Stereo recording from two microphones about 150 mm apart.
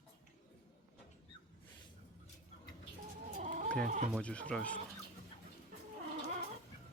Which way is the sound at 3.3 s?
60° right (ahead or behind).